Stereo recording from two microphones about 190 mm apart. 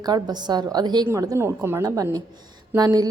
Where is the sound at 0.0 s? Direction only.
20° right (ahead or behind).